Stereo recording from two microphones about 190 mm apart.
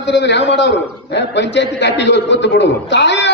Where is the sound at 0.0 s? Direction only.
65° left (ahead or behind).